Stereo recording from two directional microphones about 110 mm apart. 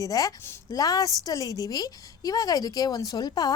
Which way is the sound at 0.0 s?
30° left (ahead or behind).